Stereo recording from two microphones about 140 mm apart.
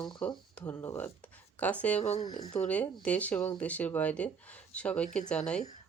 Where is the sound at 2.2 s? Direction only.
30° left (ahead or behind).